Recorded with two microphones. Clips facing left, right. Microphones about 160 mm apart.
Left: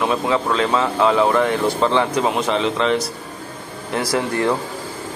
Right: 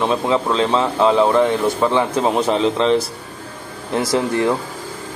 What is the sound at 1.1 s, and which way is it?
Speech, 10° right (ahead or behind).